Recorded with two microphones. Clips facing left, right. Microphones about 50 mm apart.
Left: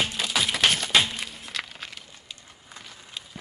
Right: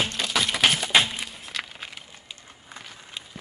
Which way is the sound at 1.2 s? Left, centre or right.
Centre.